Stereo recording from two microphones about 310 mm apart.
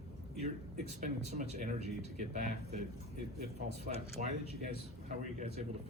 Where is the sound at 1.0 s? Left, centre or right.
Right.